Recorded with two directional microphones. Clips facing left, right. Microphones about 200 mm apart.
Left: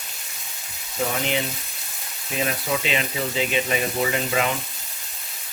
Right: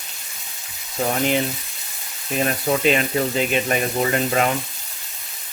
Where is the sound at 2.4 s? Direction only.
50° right (ahead or behind).